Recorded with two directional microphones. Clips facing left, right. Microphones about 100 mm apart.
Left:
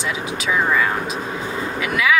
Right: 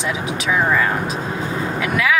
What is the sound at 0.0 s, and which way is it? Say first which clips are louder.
Speech: right 2 dB; centre (ahead or behind).